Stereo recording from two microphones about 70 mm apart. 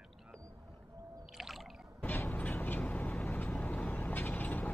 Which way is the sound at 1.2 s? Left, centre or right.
Centre.